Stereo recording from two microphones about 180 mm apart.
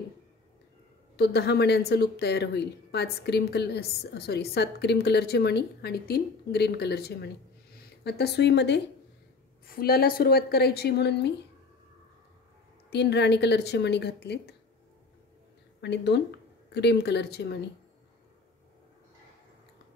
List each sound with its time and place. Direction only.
1.1 s a woman's voice: 65° left (ahead or behind)
9.7 s a woman's voice: 55° left (ahead or behind)
12.9 s a woman's voice: 70° left (ahead or behind)
15.8 s a woman's voice: 70° left (ahead or behind)